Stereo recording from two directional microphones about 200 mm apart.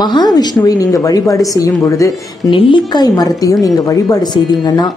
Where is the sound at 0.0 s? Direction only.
20° left (ahead or behind).